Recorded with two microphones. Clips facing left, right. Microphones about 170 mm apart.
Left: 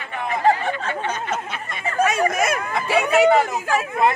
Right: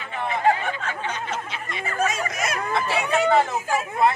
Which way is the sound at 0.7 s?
40° left (ahead or behind).